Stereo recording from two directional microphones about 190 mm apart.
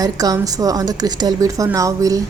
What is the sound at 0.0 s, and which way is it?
Speech, 20° right (ahead or behind).